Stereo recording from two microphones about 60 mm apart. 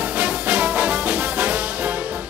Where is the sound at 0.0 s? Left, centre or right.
Centre.